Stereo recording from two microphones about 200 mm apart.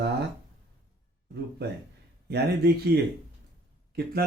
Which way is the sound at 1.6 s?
55° right (ahead or behind).